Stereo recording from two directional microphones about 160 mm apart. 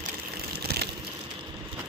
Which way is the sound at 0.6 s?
90° right.